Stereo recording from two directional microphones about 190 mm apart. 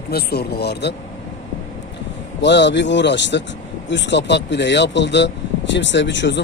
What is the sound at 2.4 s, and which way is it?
Speech, 65° left (ahead or behind).